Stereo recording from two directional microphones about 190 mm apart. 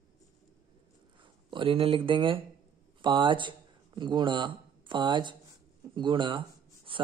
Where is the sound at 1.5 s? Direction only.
30° right (ahead or behind).